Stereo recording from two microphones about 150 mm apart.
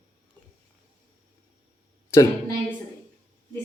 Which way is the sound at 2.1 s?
20° left (ahead or behind).